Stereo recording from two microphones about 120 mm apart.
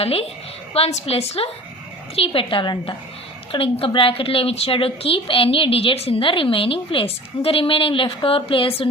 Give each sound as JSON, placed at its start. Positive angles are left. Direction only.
{"t": 0.0, "sound": "a woman's voice", "side_deg": 55}
{"t": 3.5, "sound": "a woman's voice", "side_deg": 55}